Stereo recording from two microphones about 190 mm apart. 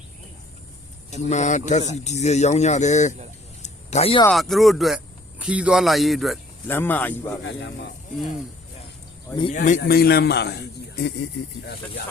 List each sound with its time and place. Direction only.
1.1 s speech: 35° left (ahead or behind)
3.6 s a sound: 35° left (ahead or behind)
4.3 s speech: centre (ahead or behind)
6.7 s speech: 10° left (ahead or behind)
7.4 s speech: 70° left (ahead or behind)
9.5 s a man's voice: 45° left (ahead or behind)